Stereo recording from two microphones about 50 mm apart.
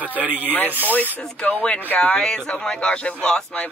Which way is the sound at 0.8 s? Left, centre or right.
Left.